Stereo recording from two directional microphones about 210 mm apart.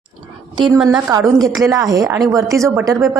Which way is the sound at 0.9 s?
15° right (ahead or behind).